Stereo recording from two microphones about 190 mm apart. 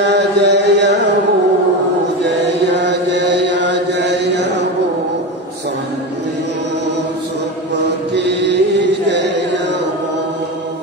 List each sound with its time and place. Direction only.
0.0 s carnatic music: 65° right (ahead or behind)
2.7 s chant: 65° right (ahead or behind)
7.8 s mantra: 65° right (ahead or behind)
9.0 s a sound: 65° right (ahead or behind)